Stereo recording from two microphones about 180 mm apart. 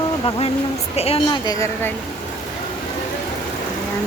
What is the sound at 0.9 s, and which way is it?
Speech, 35° left (ahead or behind).